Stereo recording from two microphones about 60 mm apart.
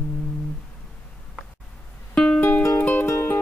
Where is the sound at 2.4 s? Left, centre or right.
Left.